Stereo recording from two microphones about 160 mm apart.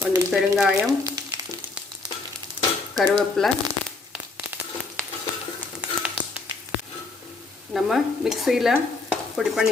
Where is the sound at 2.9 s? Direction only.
25° right (ahead or behind).